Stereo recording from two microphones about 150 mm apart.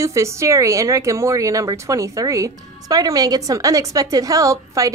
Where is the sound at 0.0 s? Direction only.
20° right (ahead or behind).